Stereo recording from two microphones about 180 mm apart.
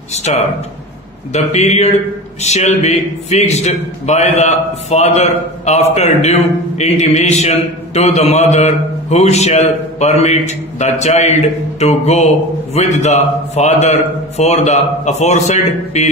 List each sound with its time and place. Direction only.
0.3 s a man's voice: 40° left (ahead or behind)